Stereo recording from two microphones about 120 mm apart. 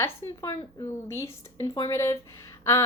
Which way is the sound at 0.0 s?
20° left (ahead or behind).